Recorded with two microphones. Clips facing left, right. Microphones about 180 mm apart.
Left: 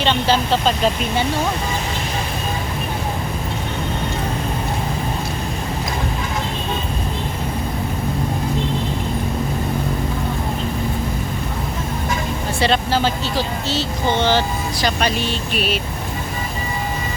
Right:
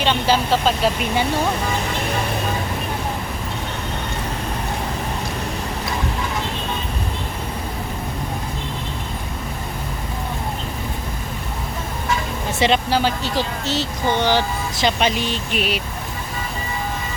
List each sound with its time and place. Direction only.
0.0 s speech: 10° right (ahead or behind)
12.5 s speech: 15° right (ahead or behind)